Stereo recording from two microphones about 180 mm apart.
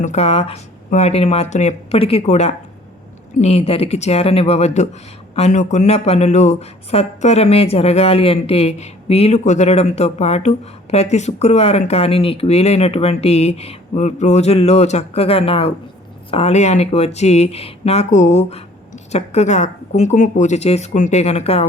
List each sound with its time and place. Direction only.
0.0 s speech: 40° left (ahead or behind)